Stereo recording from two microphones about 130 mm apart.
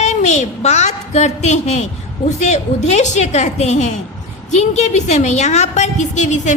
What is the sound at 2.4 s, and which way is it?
A woman's voice, 60° left (ahead or behind).